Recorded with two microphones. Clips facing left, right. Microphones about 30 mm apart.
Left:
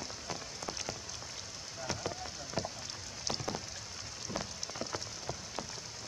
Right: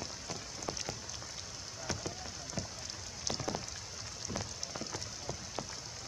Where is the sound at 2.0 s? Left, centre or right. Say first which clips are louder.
Left 3 dB; left.